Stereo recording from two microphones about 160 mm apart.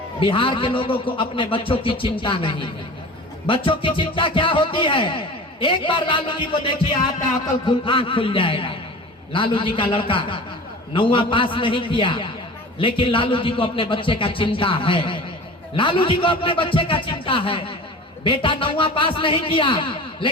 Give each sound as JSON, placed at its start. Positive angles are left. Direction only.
{"t": 0.2, "sound": "speech", "side_deg": 35}
{"t": 7.9, "sound": "speech", "side_deg": 35}